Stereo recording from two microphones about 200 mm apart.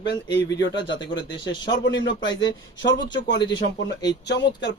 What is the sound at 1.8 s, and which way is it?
Speech, 60° left (ahead or behind).